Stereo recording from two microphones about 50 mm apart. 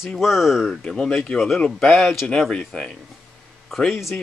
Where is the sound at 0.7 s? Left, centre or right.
Centre.